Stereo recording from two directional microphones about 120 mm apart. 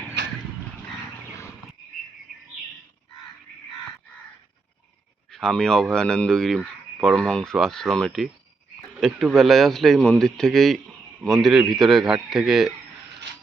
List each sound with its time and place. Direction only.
2.3 s bird: centre (ahead or behind)
5.3 s a man's voice: 5° left (ahead or behind)